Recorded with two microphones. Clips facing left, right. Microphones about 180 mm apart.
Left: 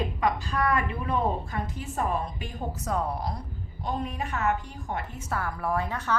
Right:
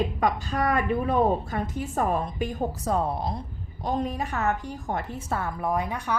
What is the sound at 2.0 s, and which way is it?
A woman's voice, 45° right (ahead or behind).